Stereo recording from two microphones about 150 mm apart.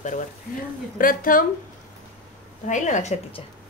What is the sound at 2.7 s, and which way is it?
Speech, 55° left (ahead or behind).